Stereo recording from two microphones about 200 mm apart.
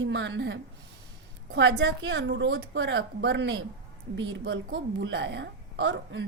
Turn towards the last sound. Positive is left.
turn(degrees=-60)  # may be behind; listen again after turning